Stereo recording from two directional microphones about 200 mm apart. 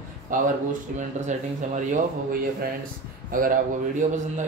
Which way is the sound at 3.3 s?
45° right (ahead or behind).